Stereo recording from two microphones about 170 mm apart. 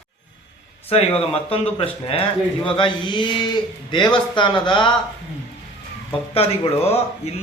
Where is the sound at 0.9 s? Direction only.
35° left (ahead or behind).